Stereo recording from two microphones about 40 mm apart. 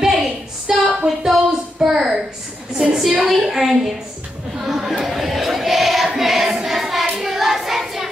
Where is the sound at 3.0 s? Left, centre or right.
Centre.